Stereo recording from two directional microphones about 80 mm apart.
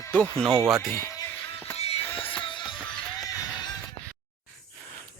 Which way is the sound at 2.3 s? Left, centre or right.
Left.